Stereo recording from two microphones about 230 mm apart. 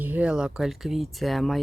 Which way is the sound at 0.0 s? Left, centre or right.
Centre.